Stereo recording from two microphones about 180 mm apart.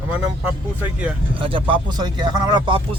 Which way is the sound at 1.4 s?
30° right (ahead or behind).